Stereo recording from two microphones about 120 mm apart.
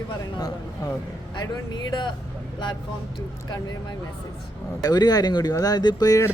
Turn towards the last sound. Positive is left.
turn(degrees=30)  # may be behind; listen again after turning